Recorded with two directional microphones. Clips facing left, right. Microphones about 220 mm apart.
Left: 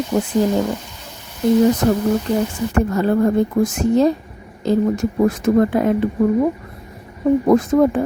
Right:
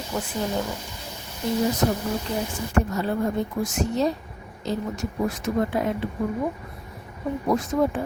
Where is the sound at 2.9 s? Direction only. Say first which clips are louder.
Left 9 dB; 55° left (ahead or behind).